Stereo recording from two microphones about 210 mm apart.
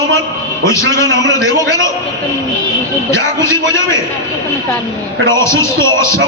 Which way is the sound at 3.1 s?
15° left (ahead or behind).